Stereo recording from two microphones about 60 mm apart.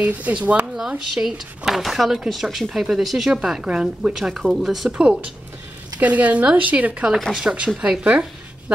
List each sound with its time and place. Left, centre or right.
0.0 s speech: right
0.7 s speech: centre
3.3 s a woman's voice: centre
4.9 s a woman's voice: centre
7.2 s speech: centre
7.5 s a woman's voice: centre